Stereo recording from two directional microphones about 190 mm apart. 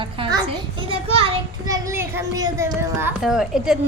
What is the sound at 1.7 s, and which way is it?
Speech, 15° right (ahead or behind).